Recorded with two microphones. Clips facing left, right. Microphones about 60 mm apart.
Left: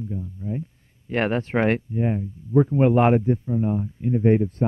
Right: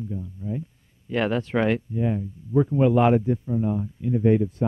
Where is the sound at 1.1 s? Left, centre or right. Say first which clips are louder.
Left 1 dB; left.